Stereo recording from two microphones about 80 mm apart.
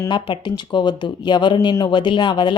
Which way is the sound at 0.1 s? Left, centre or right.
Left.